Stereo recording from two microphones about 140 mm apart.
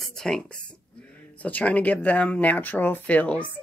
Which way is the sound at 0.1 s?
5° left (ahead or behind).